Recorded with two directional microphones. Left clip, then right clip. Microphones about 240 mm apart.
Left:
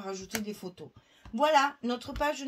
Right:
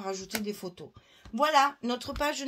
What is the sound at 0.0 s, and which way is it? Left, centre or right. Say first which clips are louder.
Speech: right 2 dB; right.